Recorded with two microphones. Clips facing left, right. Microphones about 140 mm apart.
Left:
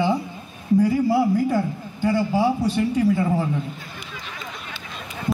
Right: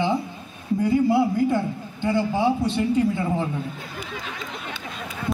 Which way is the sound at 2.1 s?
5° left (ahead or behind).